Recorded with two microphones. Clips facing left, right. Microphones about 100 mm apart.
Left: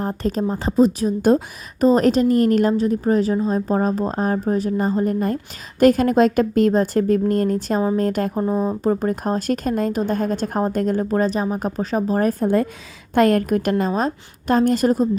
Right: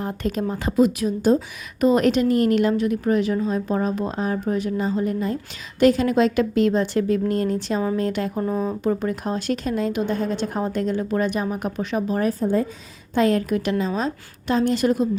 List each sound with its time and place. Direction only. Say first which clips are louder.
0.0 s a woman's voice: left 3 dB; 35° left (ahead or behind)
8.4 s speech: left 3 dB; 25° left (ahead or behind)
8.8 s a woman's voice: left 3 dB; 40° left (ahead or behind)
12.3 s a woman's voice: left 3 dB; 60° left (ahead or behind); by 15.2 s 40° left (ahead or behind)